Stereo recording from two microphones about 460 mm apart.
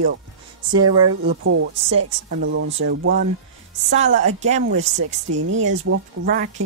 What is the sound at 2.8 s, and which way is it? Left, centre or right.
A woman's voice, right.